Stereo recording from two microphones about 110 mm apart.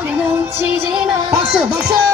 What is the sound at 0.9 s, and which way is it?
Music, 5° right (ahead or behind).